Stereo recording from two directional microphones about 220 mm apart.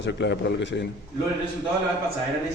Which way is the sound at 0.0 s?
50° left (ahead or behind).